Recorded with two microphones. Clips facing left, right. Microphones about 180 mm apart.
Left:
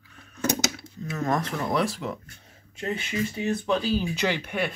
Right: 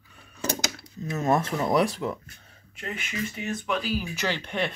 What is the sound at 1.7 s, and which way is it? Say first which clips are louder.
Speech: right 3 dB; 5° right (ahead or behind).